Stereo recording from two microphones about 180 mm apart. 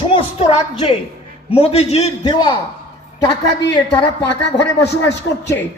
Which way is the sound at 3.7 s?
25° left (ahead or behind).